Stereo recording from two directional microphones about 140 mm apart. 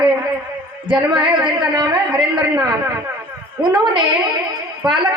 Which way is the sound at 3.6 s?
35° right (ahead or behind).